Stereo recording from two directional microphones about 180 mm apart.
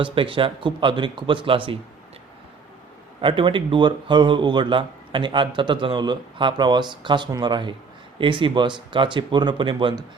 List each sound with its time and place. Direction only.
0.0 s speech: 30° right (ahead or behind)
3.2 s speech: 30° right (ahead or behind)